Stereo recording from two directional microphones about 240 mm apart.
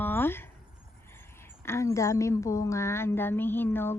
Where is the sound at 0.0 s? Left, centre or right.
Centre.